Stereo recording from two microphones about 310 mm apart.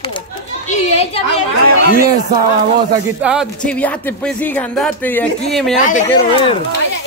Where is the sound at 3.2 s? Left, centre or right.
Centre.